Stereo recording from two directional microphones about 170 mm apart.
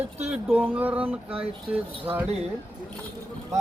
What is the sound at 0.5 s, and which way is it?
Speech, 10° right (ahead or behind).